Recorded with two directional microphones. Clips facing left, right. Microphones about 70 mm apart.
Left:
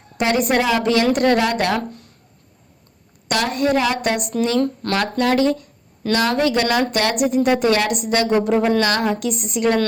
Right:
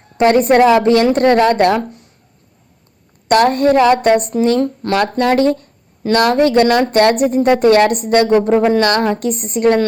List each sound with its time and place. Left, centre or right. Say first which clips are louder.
0.2 s a woman's voice: right 8 dB; right
3.2 s a woman's voice: right 8 dB; right
4.6 s speech: right 4 dB; centre
5.2 s a woman's voice: right 2 dB; right
8.8 s a woman's voice: right 5 dB; right